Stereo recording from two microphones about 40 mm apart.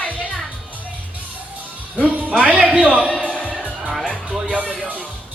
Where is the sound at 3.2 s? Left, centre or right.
Left.